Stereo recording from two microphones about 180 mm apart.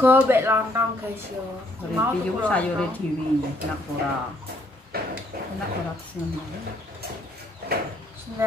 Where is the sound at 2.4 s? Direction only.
5° left (ahead or behind).